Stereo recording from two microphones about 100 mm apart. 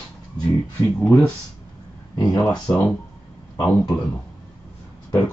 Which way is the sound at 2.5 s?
15° left (ahead or behind).